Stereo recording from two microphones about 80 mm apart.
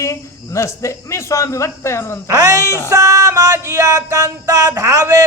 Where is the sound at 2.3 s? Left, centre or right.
Right.